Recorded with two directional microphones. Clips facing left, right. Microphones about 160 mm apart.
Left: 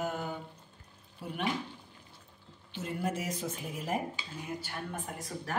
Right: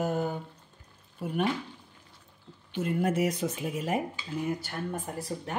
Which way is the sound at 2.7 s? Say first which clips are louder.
Right 7 dB; 60° right (ahead or behind).